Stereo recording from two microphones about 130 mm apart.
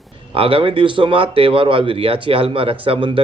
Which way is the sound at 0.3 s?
45° right (ahead or behind).